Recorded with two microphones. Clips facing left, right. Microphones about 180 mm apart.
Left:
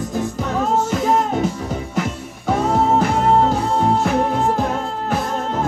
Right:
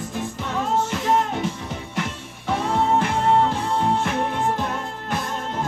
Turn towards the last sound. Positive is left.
turn(degrees=40)  # may be behind; listen again after turning